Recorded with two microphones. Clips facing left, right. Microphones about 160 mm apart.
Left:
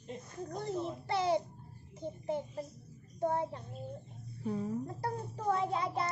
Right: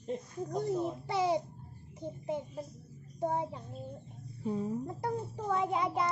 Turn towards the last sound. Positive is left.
turn(degrees=-15)  # may be behind; listen again after turning